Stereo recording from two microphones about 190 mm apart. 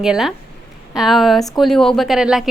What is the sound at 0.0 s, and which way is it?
A woman's voice, centre (ahead or behind).